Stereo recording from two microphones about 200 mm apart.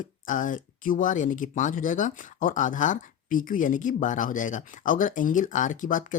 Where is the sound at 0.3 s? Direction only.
40° left (ahead or behind).